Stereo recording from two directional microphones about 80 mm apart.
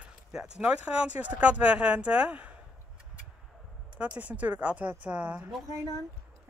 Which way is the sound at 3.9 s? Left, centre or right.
Centre.